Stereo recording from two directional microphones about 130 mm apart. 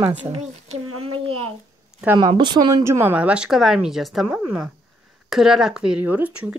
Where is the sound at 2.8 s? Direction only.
20° right (ahead or behind).